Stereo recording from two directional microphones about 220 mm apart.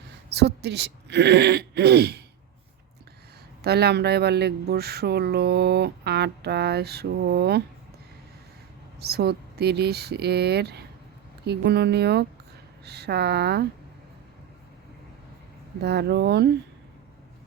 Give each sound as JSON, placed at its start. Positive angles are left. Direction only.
{"t": 0.3, "sound": "speech", "side_deg": -50}
{"t": 3.6, "sound": "speech", "side_deg": -45}
{"t": 9.0, "sound": "speech", "side_deg": -45}
{"t": 15.8, "sound": "speech", "side_deg": -50}